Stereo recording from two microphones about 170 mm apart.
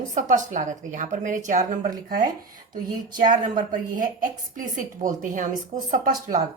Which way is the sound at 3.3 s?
50° right (ahead or behind).